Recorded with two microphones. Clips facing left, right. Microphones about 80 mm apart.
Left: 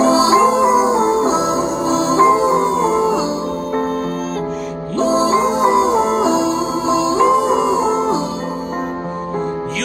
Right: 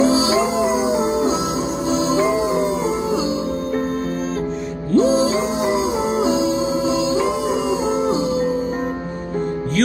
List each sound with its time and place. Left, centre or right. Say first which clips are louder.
0.0 s music: left 5 dB; left
4.9 s music: left 1 dB; left